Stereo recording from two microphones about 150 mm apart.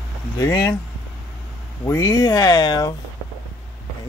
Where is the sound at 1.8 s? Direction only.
20° left (ahead or behind).